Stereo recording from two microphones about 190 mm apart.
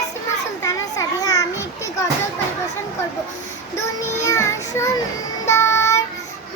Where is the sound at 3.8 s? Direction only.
15° left (ahead or behind).